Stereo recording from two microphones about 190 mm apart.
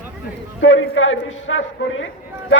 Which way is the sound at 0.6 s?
90° left.